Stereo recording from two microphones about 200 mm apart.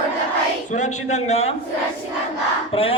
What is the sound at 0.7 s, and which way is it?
Speech, 35° left (ahead or behind).